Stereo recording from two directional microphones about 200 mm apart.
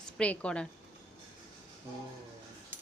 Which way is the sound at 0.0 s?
5° left (ahead or behind).